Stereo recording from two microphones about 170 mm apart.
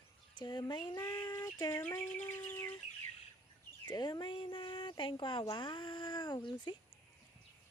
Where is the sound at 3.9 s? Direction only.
25° left (ahead or behind).